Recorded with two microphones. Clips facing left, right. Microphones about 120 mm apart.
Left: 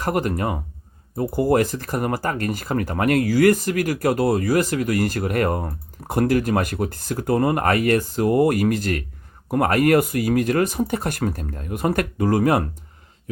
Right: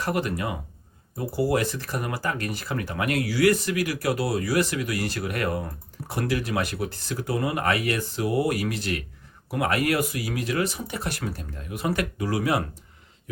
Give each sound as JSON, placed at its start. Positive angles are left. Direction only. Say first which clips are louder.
{"t": 0.0, "sound": "speech", "louder": "left 4 dB", "side_deg": 45}